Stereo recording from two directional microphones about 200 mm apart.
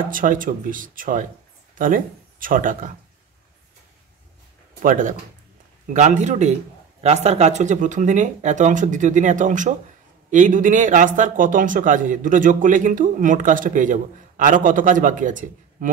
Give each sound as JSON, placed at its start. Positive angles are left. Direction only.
{"t": 0.1, "sound": "speech", "side_deg": -45}
{"t": 4.8, "sound": "speech", "side_deg": -40}